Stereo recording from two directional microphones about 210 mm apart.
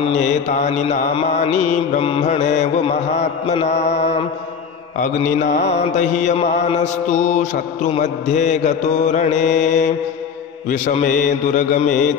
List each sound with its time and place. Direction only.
0.0 s mantra: 35° left (ahead or behind)